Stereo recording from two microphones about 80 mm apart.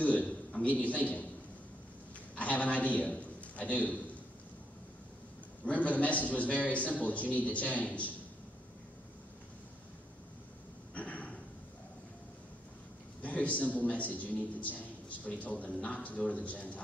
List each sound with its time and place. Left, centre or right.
0.0 s a man's voice: centre
2.3 s a man's voice: centre
5.7 s a man's voice: centre
11.0 s a sound: centre
13.2 s a man's voice: centre